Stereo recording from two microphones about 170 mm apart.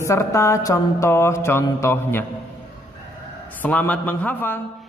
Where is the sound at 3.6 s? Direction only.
10° left (ahead or behind).